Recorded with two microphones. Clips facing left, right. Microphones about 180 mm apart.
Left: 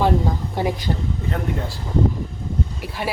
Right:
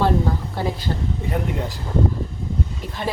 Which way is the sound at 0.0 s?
15° left (ahead or behind).